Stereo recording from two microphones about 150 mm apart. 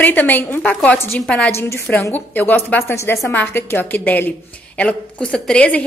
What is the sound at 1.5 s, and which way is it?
A woman's voice, 15° left (ahead or behind).